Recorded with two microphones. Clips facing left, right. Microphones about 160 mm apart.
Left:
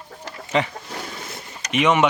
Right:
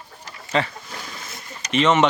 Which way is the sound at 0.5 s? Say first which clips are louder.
Left 1 dB; 15° left (ahead or behind).